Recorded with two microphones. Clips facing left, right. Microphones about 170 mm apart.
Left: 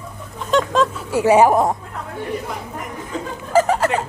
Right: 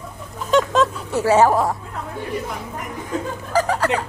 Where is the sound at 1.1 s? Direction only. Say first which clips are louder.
Left 3 dB; 15° left (ahead or behind).